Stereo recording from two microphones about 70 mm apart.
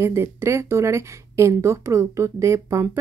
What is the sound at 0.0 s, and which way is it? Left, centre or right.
Speech, right.